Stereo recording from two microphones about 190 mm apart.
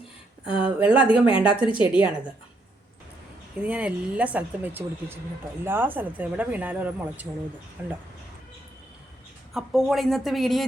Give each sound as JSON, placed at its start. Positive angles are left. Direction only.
{"t": 0.5, "sound": "speech", "side_deg": -5}
{"t": 1.5, "sound": "a woman's voice", "side_deg": 25}
{"t": 1.8, "sound": "speech", "side_deg": -5}
{"t": 3.6, "sound": "speech", "side_deg": -5}
{"t": 9.5, "sound": "speech", "side_deg": 0}